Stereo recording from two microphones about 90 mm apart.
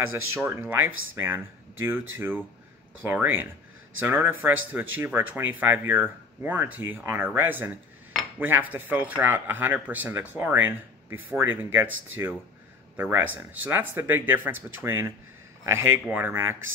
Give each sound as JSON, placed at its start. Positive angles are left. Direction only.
{"t": 0.1, "sound": "speech", "side_deg": -30}